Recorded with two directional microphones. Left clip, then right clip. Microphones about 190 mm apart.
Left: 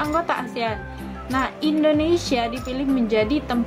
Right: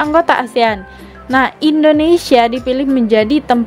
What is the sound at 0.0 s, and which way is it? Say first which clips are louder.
A woman's voice: right 11 dB; 45° right (ahead or behind).